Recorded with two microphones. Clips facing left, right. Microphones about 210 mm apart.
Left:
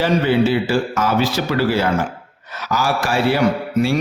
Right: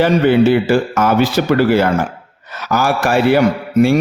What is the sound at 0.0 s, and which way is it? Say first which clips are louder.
A man's voice: right 5 dB; 55° right (ahead or behind).